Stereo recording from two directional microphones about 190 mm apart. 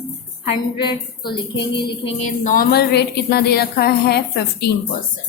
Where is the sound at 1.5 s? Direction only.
60° left (ahead or behind).